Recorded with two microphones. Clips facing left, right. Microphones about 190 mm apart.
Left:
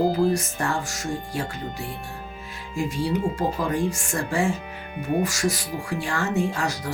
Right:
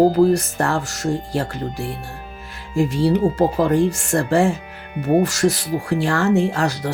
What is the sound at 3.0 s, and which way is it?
Speech, 65° right (ahead or behind).